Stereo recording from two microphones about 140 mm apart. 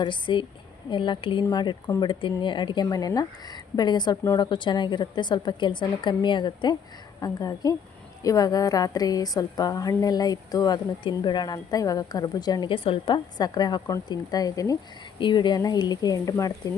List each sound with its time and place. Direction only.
0.0 s a woman's voice: 35° left (ahead or behind)